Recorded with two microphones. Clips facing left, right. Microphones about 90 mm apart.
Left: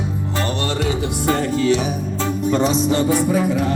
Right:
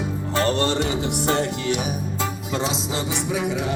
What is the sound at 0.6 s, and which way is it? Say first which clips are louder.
Music: even; 20° right (ahead or behind).